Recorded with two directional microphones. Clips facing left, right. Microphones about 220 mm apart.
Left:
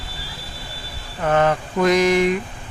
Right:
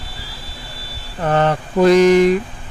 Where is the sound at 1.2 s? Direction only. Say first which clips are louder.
Right 1 dB; 35° right (ahead or behind).